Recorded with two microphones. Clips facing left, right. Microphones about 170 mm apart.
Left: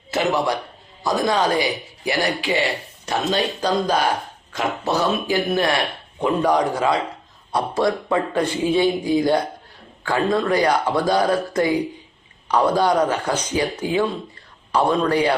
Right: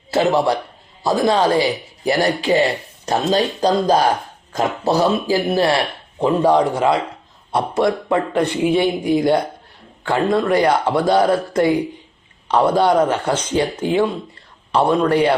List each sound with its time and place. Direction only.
0.1 s a man's voice: 30° right (ahead or behind)